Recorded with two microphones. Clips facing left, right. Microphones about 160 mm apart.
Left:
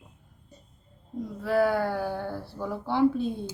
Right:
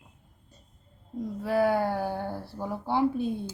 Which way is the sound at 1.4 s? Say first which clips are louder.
Left 1 dB; 15° right (ahead or behind).